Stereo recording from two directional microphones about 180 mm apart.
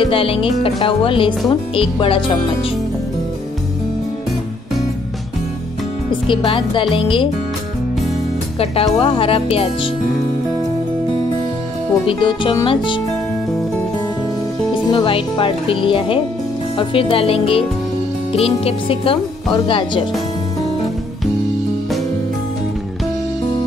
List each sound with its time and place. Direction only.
0.0 s speech: 30° left (ahead or behind)
6.2 s speech: 30° left (ahead or behind)
8.9 s speech: 30° left (ahead or behind)
12.1 s speech: 25° left (ahead or behind)
14.7 s speech: 25° left (ahead or behind)